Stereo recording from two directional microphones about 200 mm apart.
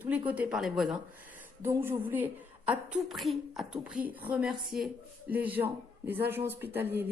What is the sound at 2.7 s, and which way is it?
A woman's voice, centre (ahead or behind).